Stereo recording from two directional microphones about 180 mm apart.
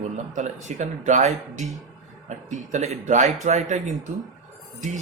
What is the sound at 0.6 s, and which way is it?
A man's voice, 40° right (ahead or behind).